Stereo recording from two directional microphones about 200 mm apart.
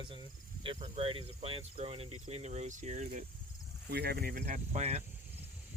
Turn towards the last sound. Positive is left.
turn(degrees=-35)  # may be behind; listen again after turning